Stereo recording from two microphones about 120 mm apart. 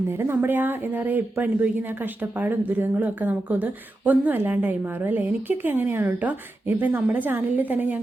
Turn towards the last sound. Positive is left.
turn(degrees=-15)  # may be behind; listen again after turning